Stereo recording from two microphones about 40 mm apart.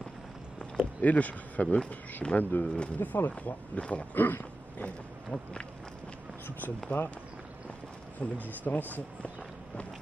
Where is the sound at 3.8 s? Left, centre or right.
Left.